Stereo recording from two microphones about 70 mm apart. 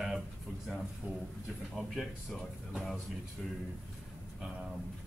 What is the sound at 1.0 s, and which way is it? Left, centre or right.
Speech, centre.